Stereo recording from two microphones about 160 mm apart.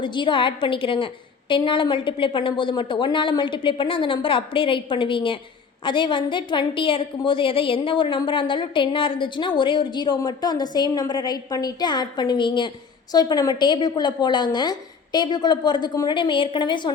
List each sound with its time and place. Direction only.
0.0 s a woman's voice: 30° left (ahead or behind)